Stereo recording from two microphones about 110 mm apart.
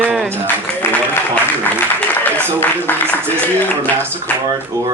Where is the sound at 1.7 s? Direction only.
15° left (ahead or behind).